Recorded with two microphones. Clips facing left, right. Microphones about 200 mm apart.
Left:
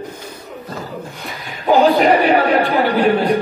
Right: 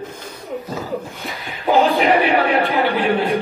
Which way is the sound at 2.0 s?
40° left (ahead or behind).